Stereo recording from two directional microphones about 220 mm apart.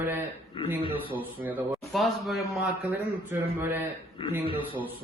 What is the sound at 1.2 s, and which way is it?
A man's voice, 10° right (ahead or behind).